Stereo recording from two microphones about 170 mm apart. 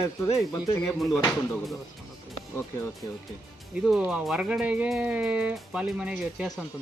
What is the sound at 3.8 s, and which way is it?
Speech, 5° right (ahead or behind).